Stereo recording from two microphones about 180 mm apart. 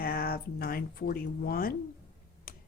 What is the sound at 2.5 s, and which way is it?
Tick-tock, 50° left (ahead or behind).